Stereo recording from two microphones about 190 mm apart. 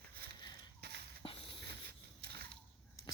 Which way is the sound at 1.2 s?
30° left (ahead or behind).